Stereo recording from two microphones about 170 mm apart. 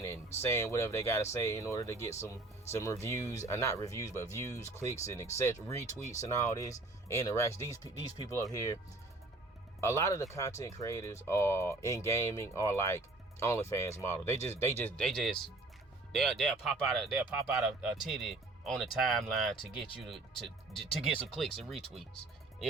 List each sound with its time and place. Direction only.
0.0 s speech: 15° left (ahead or behind)
9.8 s speech: 15° left (ahead or behind); by 22.0 s centre (ahead or behind)